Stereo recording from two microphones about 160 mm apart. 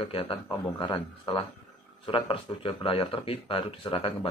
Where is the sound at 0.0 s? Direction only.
35° left (ahead or behind).